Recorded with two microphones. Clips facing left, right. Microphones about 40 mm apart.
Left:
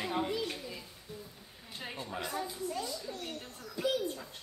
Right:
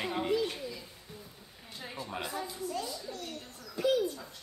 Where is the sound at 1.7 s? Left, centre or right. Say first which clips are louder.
Even; left.